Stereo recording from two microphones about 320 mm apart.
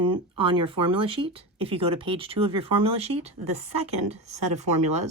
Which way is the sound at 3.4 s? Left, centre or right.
Right.